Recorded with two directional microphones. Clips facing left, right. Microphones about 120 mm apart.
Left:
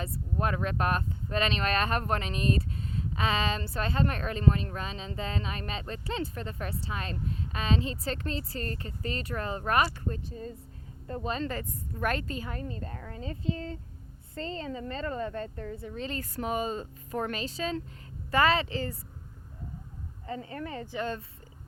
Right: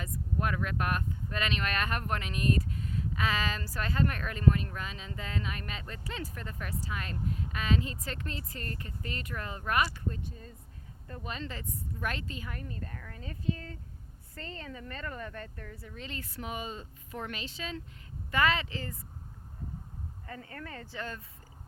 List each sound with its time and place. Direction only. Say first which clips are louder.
0.0 s a woman's voice: left 3 dB; 30° left (ahead or behind)
11.4 s a woman's voice: left 5 dB; 50° left (ahead or behind)
12.5 s a woman's voice: left 4 dB; 30° left (ahead or behind)
20.2 s speech: left 8 dB; 20° left (ahead or behind)